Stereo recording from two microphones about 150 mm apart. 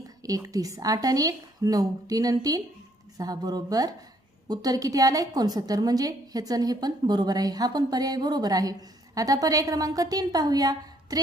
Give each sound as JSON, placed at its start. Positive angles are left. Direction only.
{"t": 0.2, "sound": "a woman's voice", "side_deg": -25}